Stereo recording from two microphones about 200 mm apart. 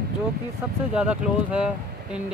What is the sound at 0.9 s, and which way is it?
Speech, 5° right (ahead or behind).